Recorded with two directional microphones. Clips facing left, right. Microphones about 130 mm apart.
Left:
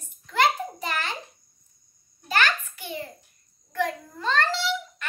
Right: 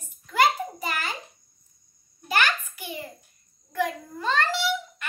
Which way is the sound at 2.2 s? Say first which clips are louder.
Even; 10° right (ahead or behind).